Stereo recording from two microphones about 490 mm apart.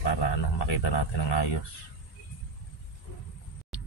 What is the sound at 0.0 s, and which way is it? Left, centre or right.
Speech, left.